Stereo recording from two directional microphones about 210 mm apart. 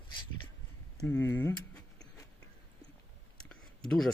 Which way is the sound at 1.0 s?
10° left (ahead or behind).